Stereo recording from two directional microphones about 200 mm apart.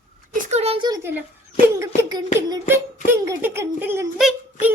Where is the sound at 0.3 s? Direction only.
35° right (ahead or behind); by 1.2 s 15° right (ahead or behind).